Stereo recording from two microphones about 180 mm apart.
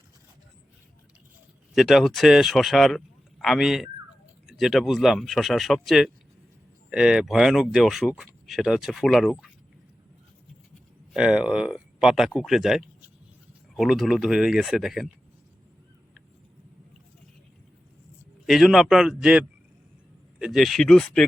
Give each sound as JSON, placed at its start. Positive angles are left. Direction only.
{"t": 1.7, "sound": "speech", "side_deg": 0}
{"t": 11.1, "sound": "speech", "side_deg": -5}
{"t": 18.4, "sound": "speech", "side_deg": 0}